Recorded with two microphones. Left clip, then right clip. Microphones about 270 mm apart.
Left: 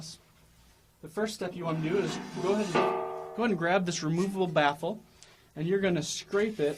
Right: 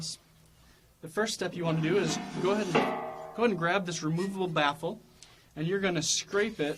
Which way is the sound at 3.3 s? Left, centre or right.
Left.